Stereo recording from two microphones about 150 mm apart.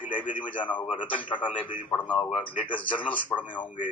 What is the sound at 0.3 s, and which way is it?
A man's voice, 10° left (ahead or behind).